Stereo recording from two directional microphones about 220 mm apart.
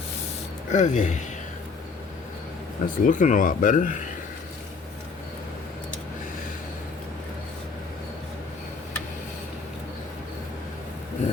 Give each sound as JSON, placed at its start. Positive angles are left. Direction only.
{"t": 0.7, "sound": "speech", "side_deg": 35}
{"t": 2.8, "sound": "speech", "side_deg": 35}